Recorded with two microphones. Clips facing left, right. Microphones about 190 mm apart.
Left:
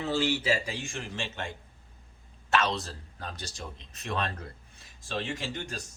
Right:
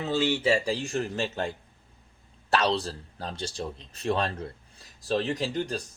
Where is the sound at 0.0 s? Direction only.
20° right (ahead or behind).